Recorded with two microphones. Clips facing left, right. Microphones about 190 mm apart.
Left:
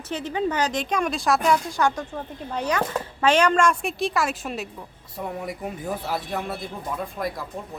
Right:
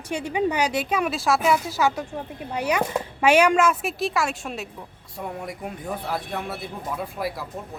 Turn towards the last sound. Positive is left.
turn(degrees=-5)  # may be behind; listen again after turning